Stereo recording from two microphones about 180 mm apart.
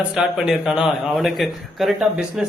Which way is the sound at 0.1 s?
5° right (ahead or behind).